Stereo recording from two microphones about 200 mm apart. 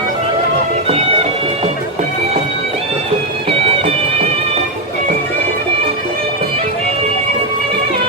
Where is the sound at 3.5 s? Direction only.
30° right (ahead or behind).